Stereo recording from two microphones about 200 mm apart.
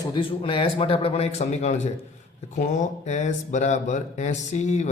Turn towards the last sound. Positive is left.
turn(degrees=35)  # may be behind; listen again after turning